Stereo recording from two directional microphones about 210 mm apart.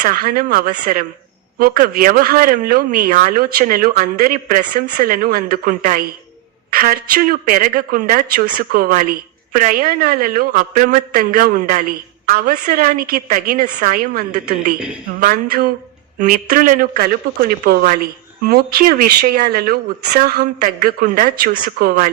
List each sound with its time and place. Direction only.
0.0 s a man's voice: 45° right (ahead or behind)